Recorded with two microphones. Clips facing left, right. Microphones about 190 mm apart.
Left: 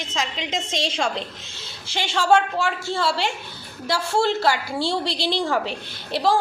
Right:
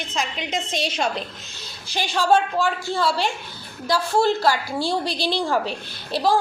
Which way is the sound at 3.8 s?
25° left (ahead or behind).